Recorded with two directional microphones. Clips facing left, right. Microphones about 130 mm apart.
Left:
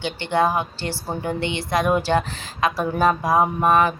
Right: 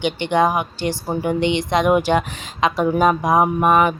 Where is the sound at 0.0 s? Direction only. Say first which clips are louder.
Right 3 dB; 15° right (ahead or behind).